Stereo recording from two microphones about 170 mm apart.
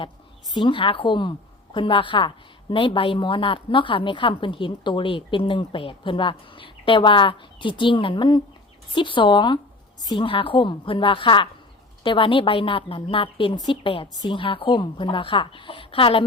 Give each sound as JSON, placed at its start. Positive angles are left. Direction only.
{"t": 0.5, "sound": "a woman's voice", "side_deg": 30}